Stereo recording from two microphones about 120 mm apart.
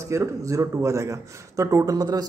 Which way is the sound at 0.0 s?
25° right (ahead or behind).